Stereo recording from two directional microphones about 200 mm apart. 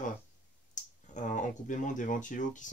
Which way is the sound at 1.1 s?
40° left (ahead or behind).